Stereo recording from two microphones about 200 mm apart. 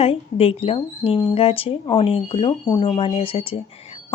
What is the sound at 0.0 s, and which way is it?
Speech, 30° left (ahead or behind).